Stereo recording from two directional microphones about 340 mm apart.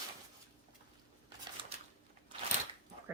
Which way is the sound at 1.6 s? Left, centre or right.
Centre.